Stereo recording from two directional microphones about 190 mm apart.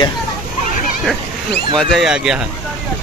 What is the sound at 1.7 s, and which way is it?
Speech, centre (ahead or behind).